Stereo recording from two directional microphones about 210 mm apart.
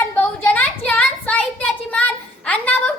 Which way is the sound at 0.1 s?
10° left (ahead or behind).